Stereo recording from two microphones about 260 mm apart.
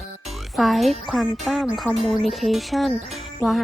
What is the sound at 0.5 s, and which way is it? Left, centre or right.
Speech, centre.